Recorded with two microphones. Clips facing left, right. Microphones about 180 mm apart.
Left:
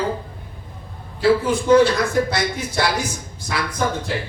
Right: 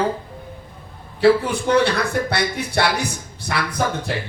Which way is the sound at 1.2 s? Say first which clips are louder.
Right 1 dB; 65° right (ahead or behind).